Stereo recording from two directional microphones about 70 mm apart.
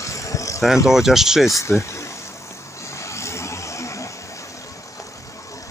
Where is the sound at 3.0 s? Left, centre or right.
Left.